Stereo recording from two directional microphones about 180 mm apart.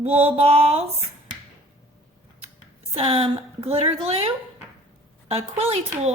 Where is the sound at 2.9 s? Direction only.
30° right (ahead or behind).